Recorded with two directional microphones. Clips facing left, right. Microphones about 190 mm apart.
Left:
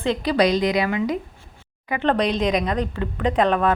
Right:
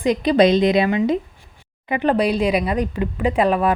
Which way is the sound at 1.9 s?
10° right (ahead or behind).